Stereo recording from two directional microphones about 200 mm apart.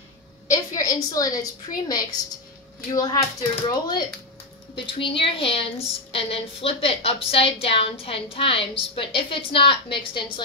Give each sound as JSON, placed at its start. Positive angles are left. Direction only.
{"t": 0.5, "sound": "a woman's voice", "side_deg": 15}